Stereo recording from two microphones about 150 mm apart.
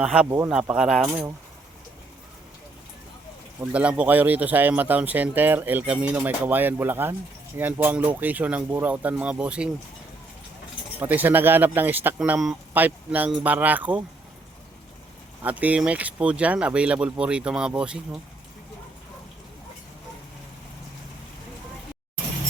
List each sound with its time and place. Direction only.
0.0 s speech: 5° right (ahead or behind)
0.3 s speech: 20° right (ahead or behind)
0.5 s speech: centre (ahead or behind)
3.7 s speech: 10° right (ahead or behind)
11.0 s speech: 10° right (ahead or behind)
15.4 s speech: 10° right (ahead or behind)